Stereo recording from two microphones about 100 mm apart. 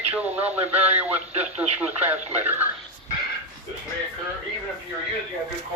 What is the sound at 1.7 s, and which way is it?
Speech, 20° right (ahead or behind).